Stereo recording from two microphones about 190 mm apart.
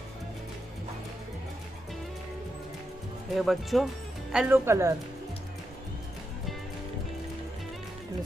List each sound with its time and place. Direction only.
3.3 s speech: centre (ahead or behind)
4.6 s speech: 15° right (ahead or behind)